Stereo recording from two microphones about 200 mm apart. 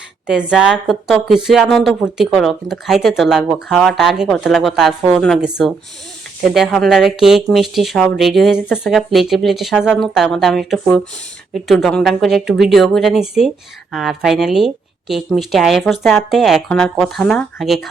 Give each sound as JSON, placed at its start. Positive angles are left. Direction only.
{"t": 0.3, "sound": "a woman's voice", "side_deg": -5}